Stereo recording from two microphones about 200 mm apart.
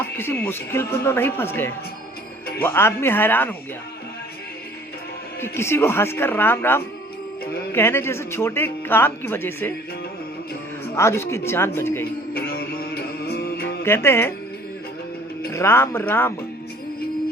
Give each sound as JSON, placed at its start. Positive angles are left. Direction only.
{"t": 0.2, "sound": "speech", "side_deg": 10}
{"t": 5.4, "sound": "speech", "side_deg": 10}
{"t": 10.9, "sound": "speech", "side_deg": 15}
{"t": 12.3, "sound": "music", "side_deg": 50}
{"t": 13.8, "sound": "speech", "side_deg": 15}
{"t": 15.5, "sound": "speech", "side_deg": 15}